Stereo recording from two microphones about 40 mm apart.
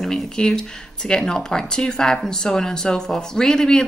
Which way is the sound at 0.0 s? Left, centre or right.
Centre.